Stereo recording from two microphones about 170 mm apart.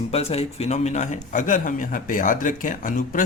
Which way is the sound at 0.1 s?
35° left (ahead or behind).